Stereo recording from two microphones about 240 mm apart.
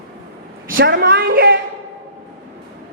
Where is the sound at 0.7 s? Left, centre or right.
Right.